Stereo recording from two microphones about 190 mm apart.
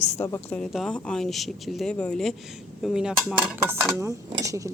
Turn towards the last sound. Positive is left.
turn(degrees=-15)  # may be behind; listen again after turning